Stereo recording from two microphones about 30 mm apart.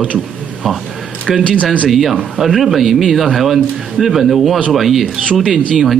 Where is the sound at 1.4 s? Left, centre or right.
Left.